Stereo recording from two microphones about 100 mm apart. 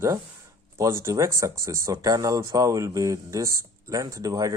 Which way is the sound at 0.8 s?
30° right (ahead or behind).